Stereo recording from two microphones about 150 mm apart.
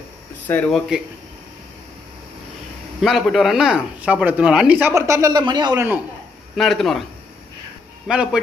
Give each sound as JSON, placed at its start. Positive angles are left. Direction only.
{"t": 0.7, "sound": "speech", "side_deg": 0}
{"t": 3.0, "sound": "speech", "side_deg": 0}
{"t": 4.9, "sound": "speech", "side_deg": -20}
{"t": 6.5, "sound": "speech", "side_deg": 0}
{"t": 8.1, "sound": "speech", "side_deg": -5}